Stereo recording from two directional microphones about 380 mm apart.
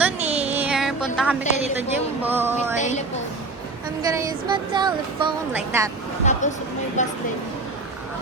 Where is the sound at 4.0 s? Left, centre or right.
Centre.